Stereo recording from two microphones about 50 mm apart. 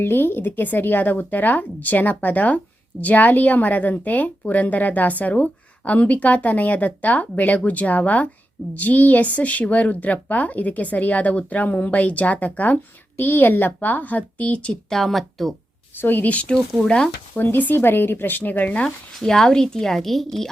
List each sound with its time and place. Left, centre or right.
0.0 s a woman's voice: left
14.7 s speech: centre
16.0 s a woman's voice: left
16.3 s speech: left
17.3 s speech: left
19.2 s speech: centre